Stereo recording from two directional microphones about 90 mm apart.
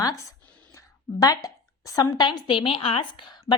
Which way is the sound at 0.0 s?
40° left (ahead or behind).